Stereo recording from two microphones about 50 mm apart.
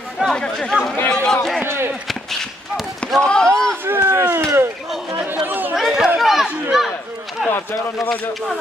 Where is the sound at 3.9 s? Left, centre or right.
Right.